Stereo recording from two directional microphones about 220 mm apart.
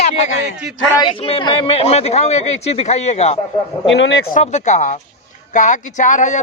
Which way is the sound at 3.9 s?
55° left (ahead or behind).